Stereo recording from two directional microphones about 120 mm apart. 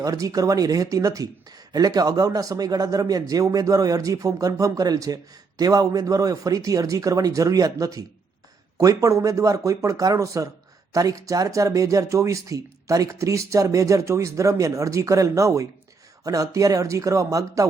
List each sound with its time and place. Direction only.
0.0 s speech: 30° right (ahead or behind)